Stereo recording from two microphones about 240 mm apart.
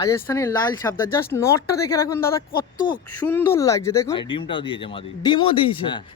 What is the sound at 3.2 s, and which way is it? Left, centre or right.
Speech, centre.